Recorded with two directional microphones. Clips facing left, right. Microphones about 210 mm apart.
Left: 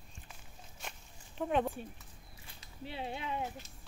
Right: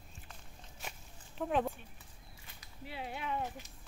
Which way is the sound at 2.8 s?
25° left (ahead or behind).